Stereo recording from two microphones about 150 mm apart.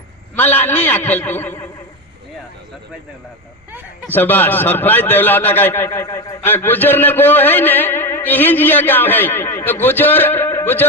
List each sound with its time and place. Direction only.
0.3 s a man's voice: 10° left (ahead or behind)
4.1 s a man's voice: 15° left (ahead or behind)